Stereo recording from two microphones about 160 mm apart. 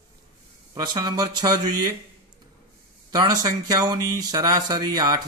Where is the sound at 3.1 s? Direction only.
25° right (ahead or behind).